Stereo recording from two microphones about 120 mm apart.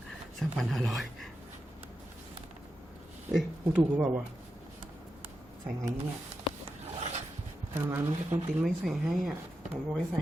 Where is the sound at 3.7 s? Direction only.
10° right (ahead or behind).